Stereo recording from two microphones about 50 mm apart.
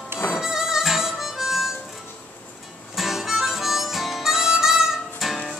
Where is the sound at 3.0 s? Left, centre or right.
Centre.